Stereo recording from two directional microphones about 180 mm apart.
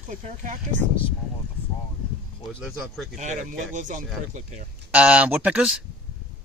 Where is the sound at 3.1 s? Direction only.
40° right (ahead or behind).